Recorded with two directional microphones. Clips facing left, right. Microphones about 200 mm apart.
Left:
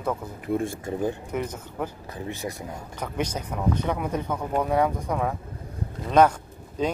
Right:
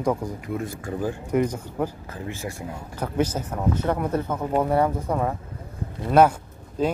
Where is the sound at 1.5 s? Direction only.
10° right (ahead or behind).